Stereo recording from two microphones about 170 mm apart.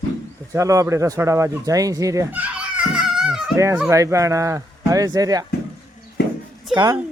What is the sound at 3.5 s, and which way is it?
Speech, 15° right (ahead or behind).